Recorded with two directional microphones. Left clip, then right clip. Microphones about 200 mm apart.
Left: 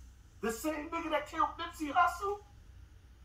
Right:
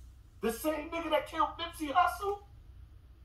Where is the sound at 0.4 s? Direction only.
15° left (ahead or behind).